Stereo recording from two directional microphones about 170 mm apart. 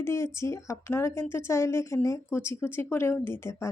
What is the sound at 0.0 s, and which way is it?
A woman's voice, 15° left (ahead or behind).